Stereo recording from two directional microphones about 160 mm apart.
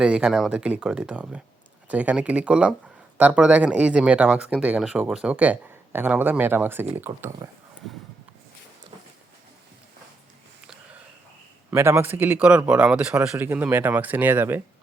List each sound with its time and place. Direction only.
0.0 s speech: 5° right (ahead or behind)
11.7 s speech: 15° right (ahead or behind)